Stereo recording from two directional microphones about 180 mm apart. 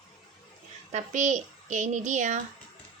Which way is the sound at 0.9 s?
40° right (ahead or behind).